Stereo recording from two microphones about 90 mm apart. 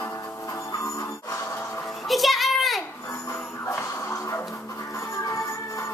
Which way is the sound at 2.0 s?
Centre (ahead or behind).